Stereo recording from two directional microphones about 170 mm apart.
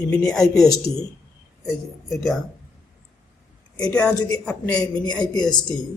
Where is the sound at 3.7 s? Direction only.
20° left (ahead or behind).